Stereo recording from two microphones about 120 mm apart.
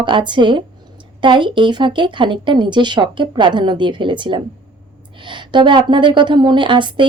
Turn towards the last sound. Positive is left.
turn(degrees=-40)  # may be behind; listen again after turning